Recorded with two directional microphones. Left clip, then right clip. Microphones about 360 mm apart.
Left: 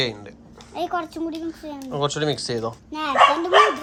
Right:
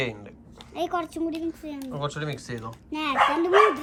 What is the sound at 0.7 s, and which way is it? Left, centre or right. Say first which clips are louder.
Speech: left 2 dB; centre.